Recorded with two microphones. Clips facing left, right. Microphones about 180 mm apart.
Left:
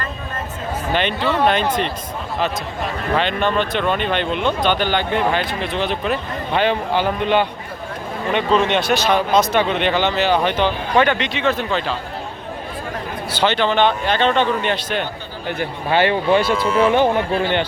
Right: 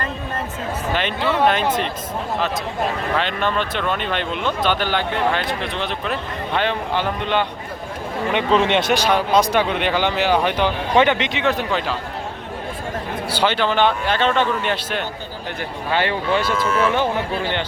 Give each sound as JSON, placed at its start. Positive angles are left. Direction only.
{"t": 0.9, "sound": "speech", "side_deg": -5}
{"t": 3.2, "sound": "speech", "side_deg": 0}
{"t": 8.3, "sound": "speech", "side_deg": -20}
{"t": 13.3, "sound": "speech", "side_deg": -10}
{"t": 15.9, "sound": "speech", "side_deg": 15}
{"t": 16.5, "sound": "speech", "side_deg": 35}